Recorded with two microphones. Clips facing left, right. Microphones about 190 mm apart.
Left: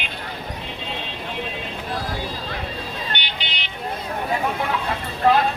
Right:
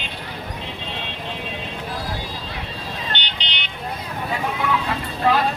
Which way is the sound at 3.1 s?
15° left (ahead or behind).